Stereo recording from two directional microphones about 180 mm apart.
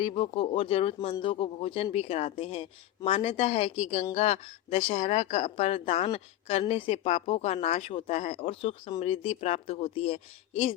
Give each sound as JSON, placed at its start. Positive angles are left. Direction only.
{"t": 0.0, "sound": "speech", "side_deg": 30}